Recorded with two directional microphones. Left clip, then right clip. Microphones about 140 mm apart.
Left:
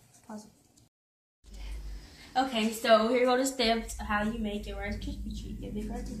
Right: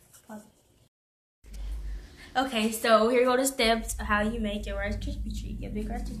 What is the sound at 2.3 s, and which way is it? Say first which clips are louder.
A woman's voice: right 1 dB; 20° right (ahead or behind).